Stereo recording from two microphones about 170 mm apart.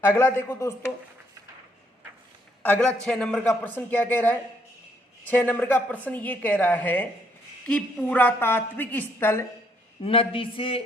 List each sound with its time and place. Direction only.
0.0 s a woman's voice: 15° left (ahead or behind)
2.6 s a woman's voice: 10° left (ahead or behind)
10.0 s a man's voice: 30° left (ahead or behind)